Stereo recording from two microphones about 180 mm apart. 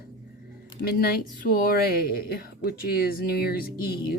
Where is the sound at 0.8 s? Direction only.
60° left (ahead or behind).